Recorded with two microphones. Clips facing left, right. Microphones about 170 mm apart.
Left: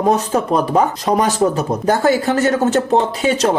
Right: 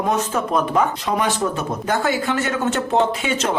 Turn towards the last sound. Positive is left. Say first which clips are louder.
# left 5 dB
turn(degrees=35)  # may be behind; listen again after turning